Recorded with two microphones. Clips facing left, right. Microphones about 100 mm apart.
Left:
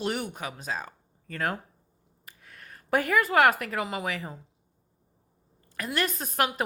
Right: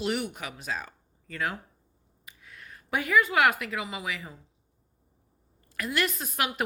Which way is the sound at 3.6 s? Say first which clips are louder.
Left 3 dB; 45° left (ahead or behind).